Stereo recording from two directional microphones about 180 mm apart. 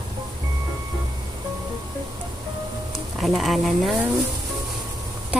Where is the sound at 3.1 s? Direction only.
Centre (ahead or behind).